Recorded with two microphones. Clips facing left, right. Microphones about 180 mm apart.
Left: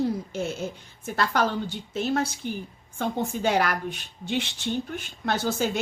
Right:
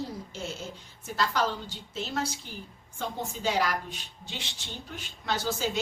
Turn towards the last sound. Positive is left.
turn(degrees=55)  # may be behind; listen again after turning